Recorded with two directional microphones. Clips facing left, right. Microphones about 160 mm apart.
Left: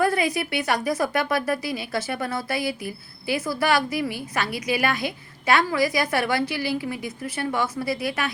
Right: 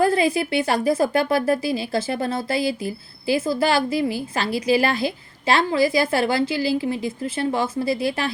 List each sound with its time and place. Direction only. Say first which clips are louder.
0.0 s speech: right 4 dB; 25° right (ahead or behind)